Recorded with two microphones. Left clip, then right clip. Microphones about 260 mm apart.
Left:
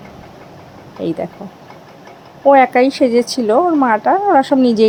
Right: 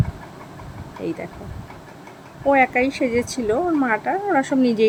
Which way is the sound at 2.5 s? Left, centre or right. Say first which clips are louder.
Left 7 dB; centre.